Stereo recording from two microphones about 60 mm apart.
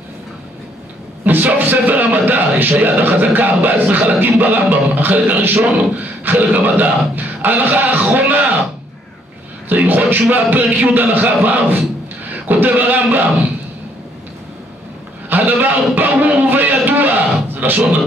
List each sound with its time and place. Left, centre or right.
1.2 s a man's voice: right
9.7 s speech: right
15.2 s speech: right
16.8 s a sound: right